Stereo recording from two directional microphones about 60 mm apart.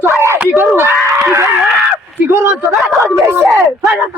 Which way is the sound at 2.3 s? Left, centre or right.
Right.